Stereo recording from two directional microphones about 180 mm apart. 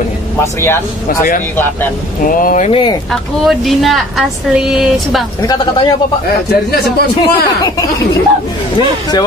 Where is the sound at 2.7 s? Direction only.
30° left (ahead or behind).